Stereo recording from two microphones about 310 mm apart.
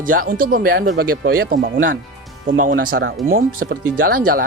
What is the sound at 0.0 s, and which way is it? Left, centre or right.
Speech, right.